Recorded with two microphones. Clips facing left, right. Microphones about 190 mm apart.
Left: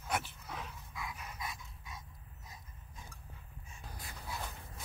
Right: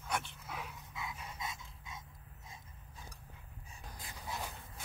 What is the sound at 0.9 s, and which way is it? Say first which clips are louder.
Dog: even; 25° right (ahead or behind).